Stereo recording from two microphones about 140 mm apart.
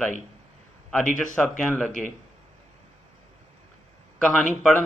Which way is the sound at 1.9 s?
65° left (ahead or behind).